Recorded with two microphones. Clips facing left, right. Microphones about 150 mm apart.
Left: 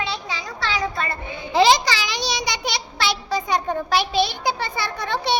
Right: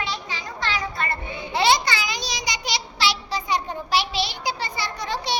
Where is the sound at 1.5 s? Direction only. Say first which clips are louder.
Left 4 dB; 90° left.